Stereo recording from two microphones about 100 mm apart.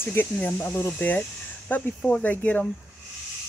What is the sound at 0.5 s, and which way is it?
Speech, 25° left (ahead or behind).